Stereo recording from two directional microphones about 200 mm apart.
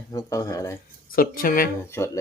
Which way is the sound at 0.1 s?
15° left (ahead or behind).